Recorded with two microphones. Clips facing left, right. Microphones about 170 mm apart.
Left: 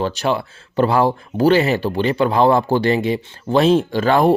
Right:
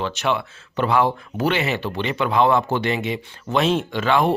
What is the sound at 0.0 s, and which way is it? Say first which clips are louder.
Speech: left 3 dB; 35° left (ahead or behind).